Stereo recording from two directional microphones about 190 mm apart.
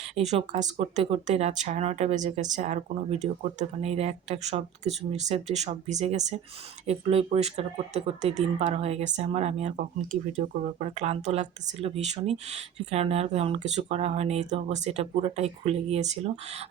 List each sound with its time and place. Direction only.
0.2 s speech: 35° right (ahead or behind)